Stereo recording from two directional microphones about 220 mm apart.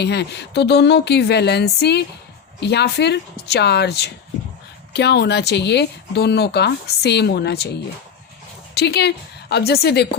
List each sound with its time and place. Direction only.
0.0 s speech: 50° left (ahead or behind)
8.7 s speech: 50° left (ahead or behind)